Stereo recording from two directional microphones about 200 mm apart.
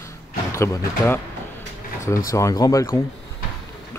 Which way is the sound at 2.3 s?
15° left (ahead or behind).